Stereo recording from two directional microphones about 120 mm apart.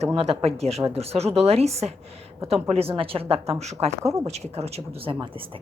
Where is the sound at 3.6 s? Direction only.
65° right (ahead or behind).